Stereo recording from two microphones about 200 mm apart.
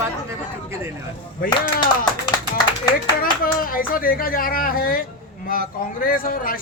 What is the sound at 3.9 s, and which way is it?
Speech, 45° left (ahead or behind).